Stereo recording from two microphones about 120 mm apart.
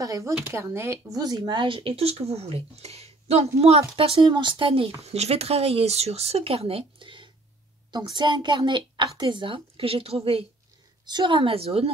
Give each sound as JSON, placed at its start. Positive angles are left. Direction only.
{"t": 0.0, "sound": "a woman's voice", "side_deg": -30}
{"t": 5.0, "sound": "a woman's voice", "side_deg": -60}
{"t": 11.1, "sound": "a woman's voice", "side_deg": -40}